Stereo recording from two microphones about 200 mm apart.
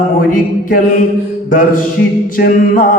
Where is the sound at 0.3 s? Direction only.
45° left (ahead or behind).